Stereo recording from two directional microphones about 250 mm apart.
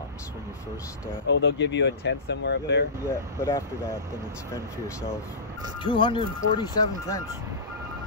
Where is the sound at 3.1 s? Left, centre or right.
Centre.